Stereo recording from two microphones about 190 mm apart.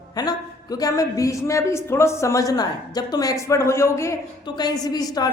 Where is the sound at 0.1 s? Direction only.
20° left (ahead or behind).